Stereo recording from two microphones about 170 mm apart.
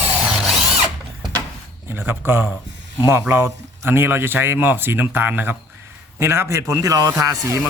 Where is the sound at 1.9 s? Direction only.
15° right (ahead or behind).